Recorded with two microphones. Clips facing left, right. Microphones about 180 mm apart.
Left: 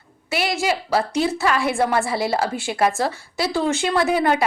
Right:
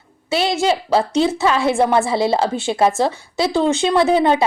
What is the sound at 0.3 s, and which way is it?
A woman's voice, 25° right (ahead or behind).